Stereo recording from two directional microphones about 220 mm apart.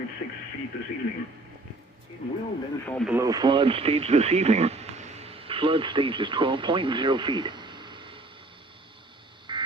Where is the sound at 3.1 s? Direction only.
15° right (ahead or behind).